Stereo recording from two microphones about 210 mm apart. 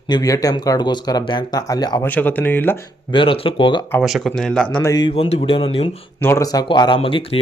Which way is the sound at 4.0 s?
Centre (ahead or behind).